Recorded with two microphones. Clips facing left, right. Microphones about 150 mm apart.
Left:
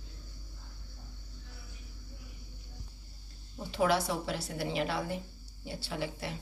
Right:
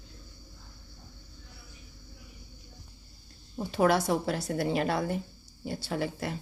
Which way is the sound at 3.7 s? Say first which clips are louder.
Right 4 dB; 50° right (ahead or behind).